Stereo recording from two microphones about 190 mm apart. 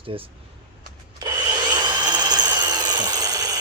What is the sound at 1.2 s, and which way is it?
Wood, 20° right (ahead or behind).